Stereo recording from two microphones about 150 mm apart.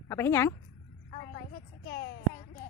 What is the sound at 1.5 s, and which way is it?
Child singing, 90° left.